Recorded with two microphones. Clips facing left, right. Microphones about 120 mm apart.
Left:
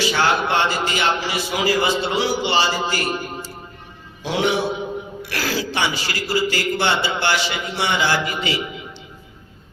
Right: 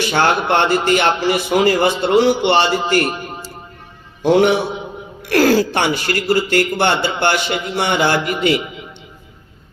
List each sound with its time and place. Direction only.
0.0 s a man's voice: 55° right (ahead or behind)
4.2 s speech: 55° right (ahead or behind)